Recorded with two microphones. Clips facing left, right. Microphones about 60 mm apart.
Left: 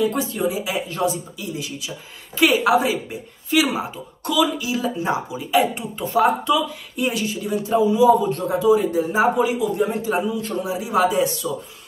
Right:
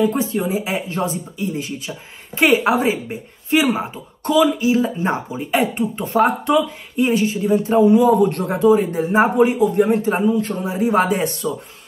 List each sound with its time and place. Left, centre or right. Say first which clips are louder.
0.0 s speech: right 2 dB; right
7.0 s speech: right 6 dB; right